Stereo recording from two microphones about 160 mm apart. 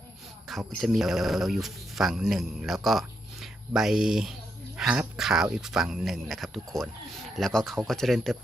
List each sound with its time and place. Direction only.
0.7 s speech: centre (ahead or behind)